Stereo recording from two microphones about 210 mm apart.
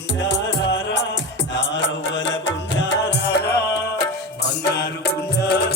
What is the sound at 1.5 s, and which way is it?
Mantra, 60° left (ahead or behind).